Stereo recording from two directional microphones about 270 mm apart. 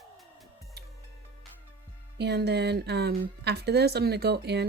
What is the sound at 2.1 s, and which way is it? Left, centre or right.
Speech, right.